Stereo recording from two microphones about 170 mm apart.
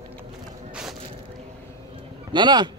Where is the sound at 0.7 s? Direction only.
5° right (ahead or behind).